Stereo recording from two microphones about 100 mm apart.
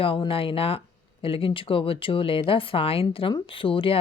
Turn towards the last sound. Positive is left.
turn(degrees=60)  # may be behind; listen again after turning